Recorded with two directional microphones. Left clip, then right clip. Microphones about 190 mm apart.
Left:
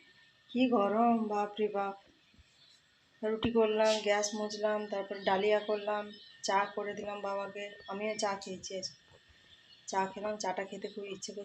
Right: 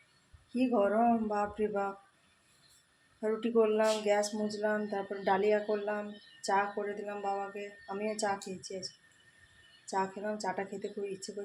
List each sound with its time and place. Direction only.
0.7 s speech: 10° right (ahead or behind)
3.2 s speech: 10° right (ahead or behind)